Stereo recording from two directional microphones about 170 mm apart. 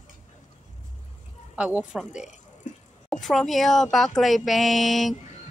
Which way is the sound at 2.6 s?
45° left (ahead or behind).